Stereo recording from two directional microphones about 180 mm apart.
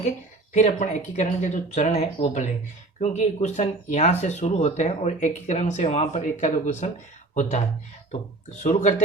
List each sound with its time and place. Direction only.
0.5 s speech: 40° left (ahead or behind)
8.1 s speech: 40° left (ahead or behind)